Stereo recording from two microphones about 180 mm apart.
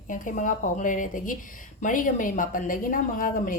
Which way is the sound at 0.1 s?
45° left (ahead or behind).